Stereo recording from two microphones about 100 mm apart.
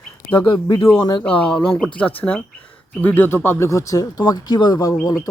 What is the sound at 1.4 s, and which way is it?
Speech, 10° left (ahead or behind).